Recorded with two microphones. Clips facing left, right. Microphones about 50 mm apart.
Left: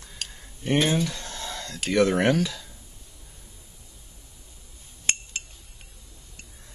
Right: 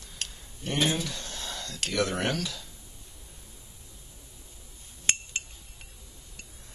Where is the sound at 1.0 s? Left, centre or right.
Left.